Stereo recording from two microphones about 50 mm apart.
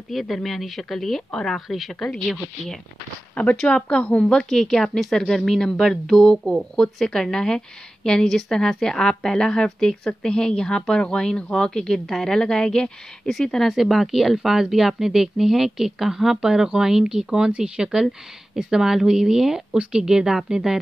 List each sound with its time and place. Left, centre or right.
0.1 s a woman's voice: centre
3.5 s speech: left
13.3 s a woman's voice: centre